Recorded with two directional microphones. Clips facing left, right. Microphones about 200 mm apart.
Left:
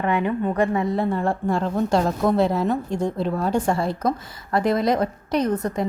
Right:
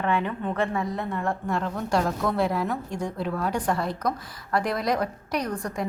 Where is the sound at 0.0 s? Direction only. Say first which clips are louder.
Left 4 dB; 15° left (ahead or behind).